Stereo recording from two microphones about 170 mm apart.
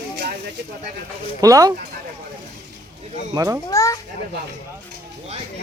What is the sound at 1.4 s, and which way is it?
Speech, 20° right (ahead or behind).